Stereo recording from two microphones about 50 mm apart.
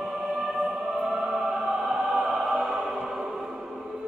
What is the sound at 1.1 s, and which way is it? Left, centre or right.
Choir, centre.